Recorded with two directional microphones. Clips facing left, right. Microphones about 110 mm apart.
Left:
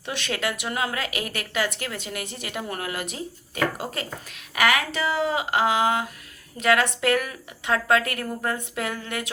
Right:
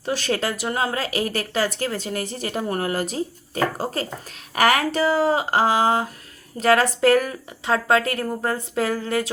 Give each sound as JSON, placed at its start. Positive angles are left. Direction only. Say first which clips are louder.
{"t": 0.0, "sound": "a woman's voice", "louder": "right 5 dB", "side_deg": -35}